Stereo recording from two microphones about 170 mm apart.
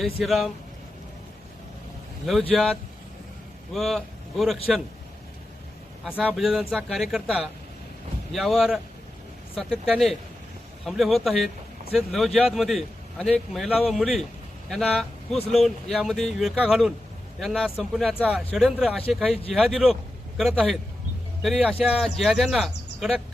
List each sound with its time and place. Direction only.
0.0 s a man's voice: centre (ahead or behind)
2.5 s a man's voice: 5° left (ahead or behind)
6.2 s a man's voice: centre (ahead or behind)
19.3 s speech: 35° left (ahead or behind)
19.5 s a man's voice: centre (ahead or behind)